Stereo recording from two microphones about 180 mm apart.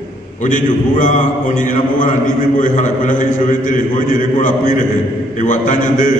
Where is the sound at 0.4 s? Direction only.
45° left (ahead or behind).